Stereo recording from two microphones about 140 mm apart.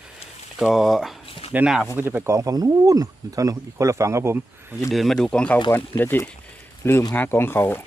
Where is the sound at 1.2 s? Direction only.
40° left (ahead or behind).